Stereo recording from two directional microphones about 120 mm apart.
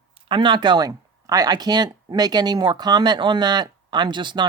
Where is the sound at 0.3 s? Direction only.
40° right (ahead or behind).